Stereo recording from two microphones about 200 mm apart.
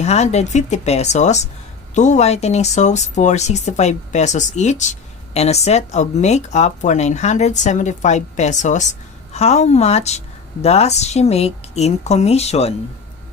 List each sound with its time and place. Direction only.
0.0 s speech: 35° left (ahead or behind)